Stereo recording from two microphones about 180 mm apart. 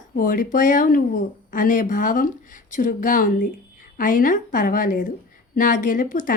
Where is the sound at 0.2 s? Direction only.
50° left (ahead or behind).